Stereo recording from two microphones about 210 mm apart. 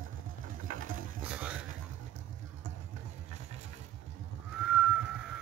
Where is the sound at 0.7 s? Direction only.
40° right (ahead or behind).